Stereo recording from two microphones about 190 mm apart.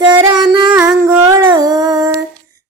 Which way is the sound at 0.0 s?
20° right (ahead or behind).